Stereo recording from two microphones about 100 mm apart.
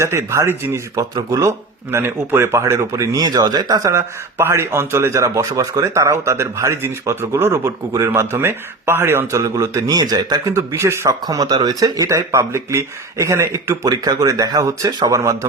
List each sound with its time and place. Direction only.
0.0 s speech: 30° right (ahead or behind)
10.5 s speech: 30° right (ahead or behind)